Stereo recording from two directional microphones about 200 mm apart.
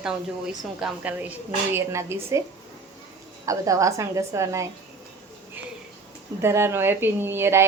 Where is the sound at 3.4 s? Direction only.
15° right (ahead or behind).